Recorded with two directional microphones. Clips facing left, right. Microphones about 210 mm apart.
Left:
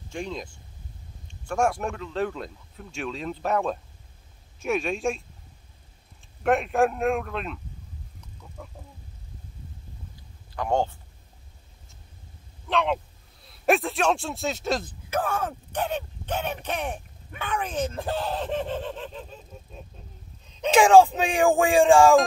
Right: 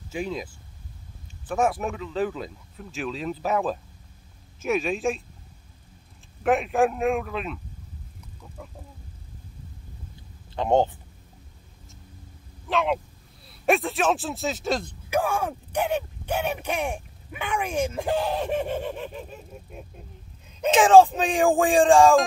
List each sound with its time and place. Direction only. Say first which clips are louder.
0.1 s speech: right 3 dB; 5° right (ahead or behind)
6.4 s speech: even; centre (ahead or behind)
10.5 s speech: right 4 dB; 20° right (ahead or behind)
12.6 s speech: right 1 dB; 5° right (ahead or behind)
15.0 s speech: right 3 dB; 10° right (ahead or behind)